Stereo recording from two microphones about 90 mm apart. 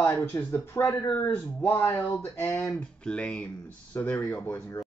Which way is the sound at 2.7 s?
10° left (ahead or behind).